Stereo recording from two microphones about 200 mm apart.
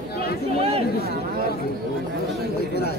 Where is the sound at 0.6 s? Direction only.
30° right (ahead or behind).